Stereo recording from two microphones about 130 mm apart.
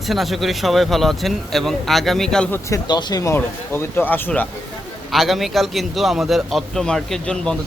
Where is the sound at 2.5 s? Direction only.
25° left (ahead or behind).